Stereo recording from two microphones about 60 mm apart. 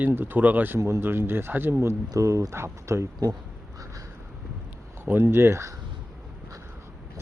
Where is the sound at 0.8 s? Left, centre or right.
Right.